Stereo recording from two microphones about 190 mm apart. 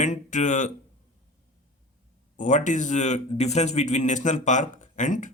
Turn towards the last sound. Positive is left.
turn(degrees=40)  # may be behind; listen again after turning